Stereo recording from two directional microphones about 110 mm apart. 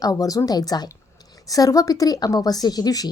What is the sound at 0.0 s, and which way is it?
A woman's voice, 35° left (ahead or behind).